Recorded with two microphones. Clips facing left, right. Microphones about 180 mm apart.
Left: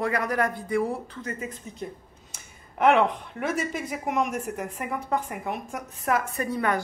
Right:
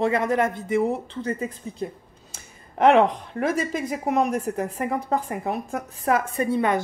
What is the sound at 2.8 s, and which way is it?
A woman's voice, 35° right (ahead or behind).